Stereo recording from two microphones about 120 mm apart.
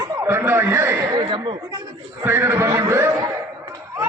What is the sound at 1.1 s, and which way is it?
Chatter, 40° right (ahead or behind).